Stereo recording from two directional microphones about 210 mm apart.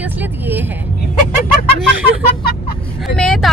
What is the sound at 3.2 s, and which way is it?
Speech, 5° left (ahead or behind).